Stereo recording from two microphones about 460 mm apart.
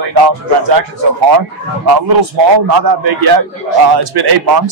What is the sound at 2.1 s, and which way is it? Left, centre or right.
A man's voice, right.